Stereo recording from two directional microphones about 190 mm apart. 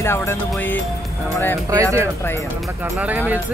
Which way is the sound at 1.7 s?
15° right (ahead or behind).